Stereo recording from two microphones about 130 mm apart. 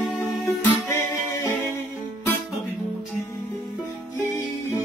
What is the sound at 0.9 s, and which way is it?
Music, 20° left (ahead or behind).